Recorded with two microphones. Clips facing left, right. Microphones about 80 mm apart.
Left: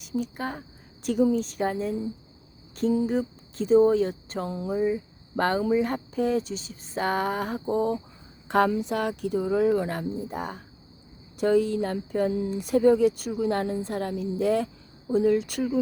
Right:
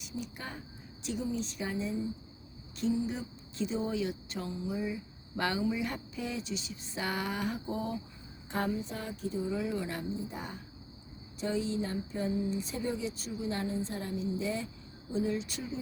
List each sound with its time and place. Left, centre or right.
0.0 s a woman's voice: left
8.4 s speech: left